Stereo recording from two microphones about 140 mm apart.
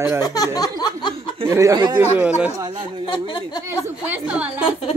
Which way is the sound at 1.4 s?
25° right (ahead or behind).